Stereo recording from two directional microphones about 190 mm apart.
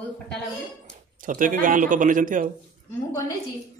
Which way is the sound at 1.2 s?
45° right (ahead or behind).